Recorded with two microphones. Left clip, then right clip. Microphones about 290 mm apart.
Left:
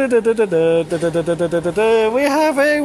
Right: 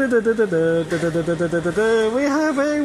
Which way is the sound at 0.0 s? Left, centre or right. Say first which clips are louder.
Left 3 dB; left.